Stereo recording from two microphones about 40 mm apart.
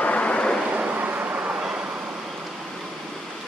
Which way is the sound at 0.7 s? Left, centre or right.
Right.